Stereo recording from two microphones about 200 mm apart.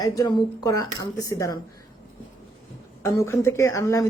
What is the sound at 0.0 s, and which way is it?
Speech, 20° left (ahead or behind).